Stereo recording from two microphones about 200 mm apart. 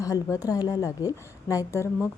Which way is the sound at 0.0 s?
15° left (ahead or behind).